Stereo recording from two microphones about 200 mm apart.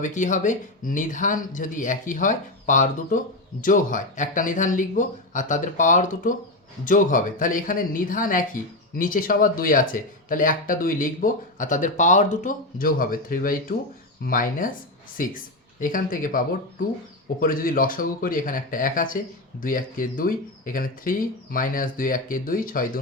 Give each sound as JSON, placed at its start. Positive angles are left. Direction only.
{"t": 0.0, "sound": "speech", "side_deg": 40}